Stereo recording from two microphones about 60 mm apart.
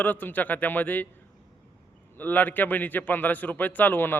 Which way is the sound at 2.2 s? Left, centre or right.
Left.